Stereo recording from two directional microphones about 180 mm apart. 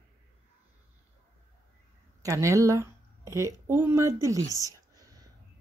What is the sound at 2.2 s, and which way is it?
Speech, 15° right (ahead or behind).